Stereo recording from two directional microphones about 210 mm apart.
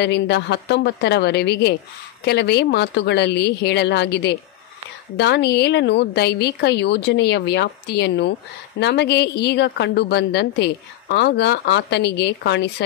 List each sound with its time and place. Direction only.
0.0 s a woman's voice: 50° left (ahead or behind)